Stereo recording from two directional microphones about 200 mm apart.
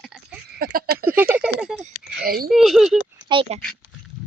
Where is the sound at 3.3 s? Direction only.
30° right (ahead or behind).